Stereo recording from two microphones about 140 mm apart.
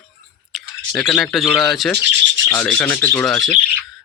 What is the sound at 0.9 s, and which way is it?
Speech, centre (ahead or behind).